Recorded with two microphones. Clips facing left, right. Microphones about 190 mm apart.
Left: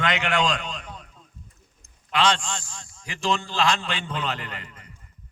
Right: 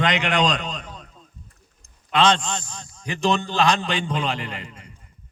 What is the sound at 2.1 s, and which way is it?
A man's voice, 20° right (ahead or behind).